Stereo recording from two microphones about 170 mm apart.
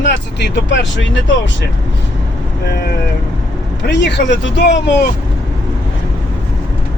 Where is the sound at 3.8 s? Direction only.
90° left.